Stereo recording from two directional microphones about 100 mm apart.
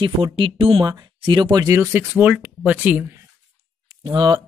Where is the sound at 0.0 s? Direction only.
60° right (ahead or behind).